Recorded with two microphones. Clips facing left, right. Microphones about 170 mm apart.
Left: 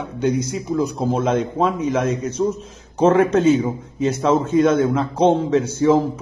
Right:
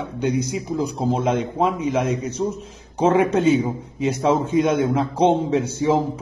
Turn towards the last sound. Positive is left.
turn(degrees=-15)  # may be behind; listen again after turning